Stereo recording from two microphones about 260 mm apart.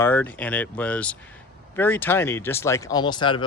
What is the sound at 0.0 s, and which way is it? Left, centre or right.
Speech, centre.